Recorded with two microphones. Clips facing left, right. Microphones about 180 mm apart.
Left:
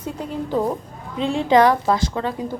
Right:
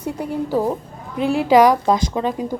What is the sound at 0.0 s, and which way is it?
A woman's voice, 10° right (ahead or behind).